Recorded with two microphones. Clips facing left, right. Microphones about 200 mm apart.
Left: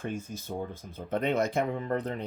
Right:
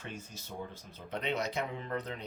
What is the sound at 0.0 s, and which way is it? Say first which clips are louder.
Speech: left 10 dB; 50° left (ahead or behind).